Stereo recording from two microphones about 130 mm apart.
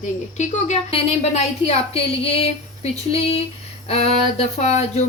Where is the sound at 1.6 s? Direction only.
55° left (ahead or behind).